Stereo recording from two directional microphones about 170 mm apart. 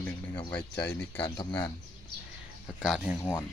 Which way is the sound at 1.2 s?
30° left (ahead or behind).